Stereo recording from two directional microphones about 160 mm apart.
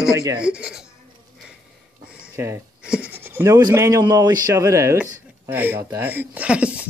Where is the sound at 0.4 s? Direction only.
5° right (ahead or behind).